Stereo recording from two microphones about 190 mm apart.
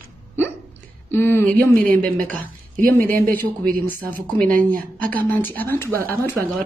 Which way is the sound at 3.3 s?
10° left (ahead or behind).